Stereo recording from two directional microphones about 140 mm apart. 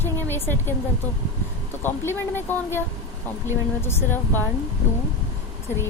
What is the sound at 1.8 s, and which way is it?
A woman's voice, 15° left (ahead or behind).